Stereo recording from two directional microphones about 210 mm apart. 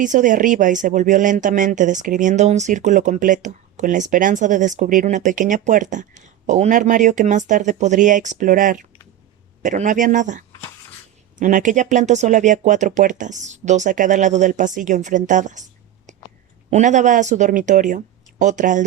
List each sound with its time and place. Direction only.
0.0 s speech: 35° right (ahead or behind)
16.6 s speech: 35° right (ahead or behind)